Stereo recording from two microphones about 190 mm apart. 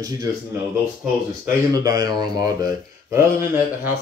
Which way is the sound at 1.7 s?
20° right (ahead or behind).